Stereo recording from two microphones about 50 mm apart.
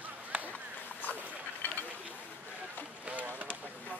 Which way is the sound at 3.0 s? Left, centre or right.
Right.